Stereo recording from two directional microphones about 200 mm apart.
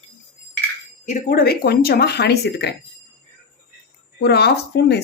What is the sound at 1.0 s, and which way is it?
Speech, 40° left (ahead or behind).